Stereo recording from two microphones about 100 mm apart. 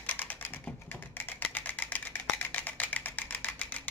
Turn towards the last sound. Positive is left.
turn(degrees=15)  # may be behind; listen again after turning